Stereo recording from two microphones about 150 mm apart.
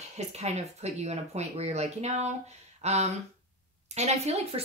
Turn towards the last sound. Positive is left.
turn(degrees=-45)  # may be behind; listen again after turning